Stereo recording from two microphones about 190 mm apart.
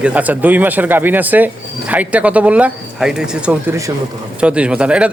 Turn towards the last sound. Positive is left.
turn(degrees=-5)  # may be behind; listen again after turning